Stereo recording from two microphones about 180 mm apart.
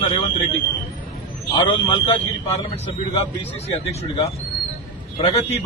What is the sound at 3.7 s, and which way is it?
Speech, 35° left (ahead or behind).